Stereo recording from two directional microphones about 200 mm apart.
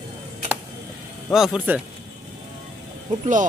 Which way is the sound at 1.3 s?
5° right (ahead or behind).